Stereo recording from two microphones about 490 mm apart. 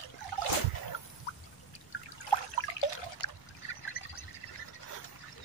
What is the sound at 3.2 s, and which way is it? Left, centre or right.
Trickle, left.